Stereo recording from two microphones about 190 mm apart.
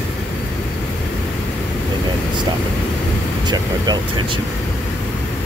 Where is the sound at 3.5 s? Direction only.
25° right (ahead or behind).